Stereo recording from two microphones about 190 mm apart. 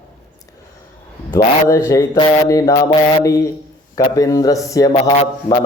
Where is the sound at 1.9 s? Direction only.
20° left (ahead or behind).